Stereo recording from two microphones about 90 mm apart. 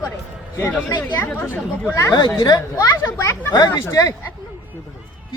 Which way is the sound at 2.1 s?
55° left (ahead or behind).